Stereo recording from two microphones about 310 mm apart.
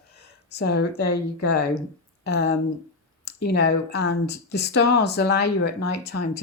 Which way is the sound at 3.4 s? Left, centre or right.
Left.